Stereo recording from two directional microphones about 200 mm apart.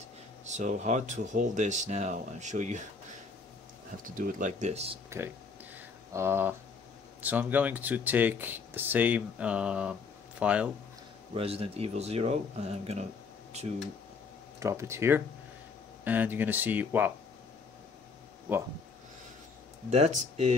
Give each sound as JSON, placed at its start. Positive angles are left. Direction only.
{"t": 0.5, "sound": "speech", "side_deg": -35}
{"t": 4.0, "sound": "speech", "side_deg": -45}
{"t": 5.8, "sound": "a sound", "side_deg": -10}
{"t": 7.2, "sound": "speech", "side_deg": -10}
{"t": 11.3, "sound": "speech", "side_deg": -30}
{"t": 13.5, "sound": "a sound", "side_deg": -35}
{"t": 14.6, "sound": "speech", "side_deg": -15}
{"t": 19.9, "sound": "speech", "side_deg": -35}